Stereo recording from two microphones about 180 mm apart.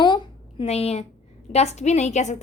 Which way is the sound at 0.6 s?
35° left (ahead or behind).